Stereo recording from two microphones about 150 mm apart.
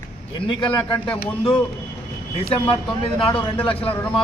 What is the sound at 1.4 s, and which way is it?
Speech, 35° left (ahead or behind).